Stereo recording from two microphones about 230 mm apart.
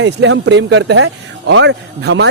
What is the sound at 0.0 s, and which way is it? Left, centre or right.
Speech, right.